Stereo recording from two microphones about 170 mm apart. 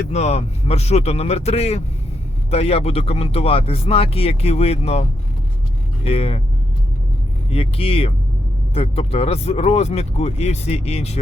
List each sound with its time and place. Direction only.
0.1 s speech: 40° left (ahead or behind)
6.1 s speech: 35° left (ahead or behind)
7.5 s speech: 35° left (ahead or behind)